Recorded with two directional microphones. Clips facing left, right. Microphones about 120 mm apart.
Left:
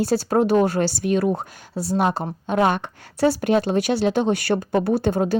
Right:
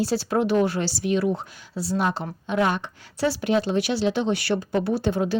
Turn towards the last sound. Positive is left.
turn(degrees=45)  # may be behind; listen again after turning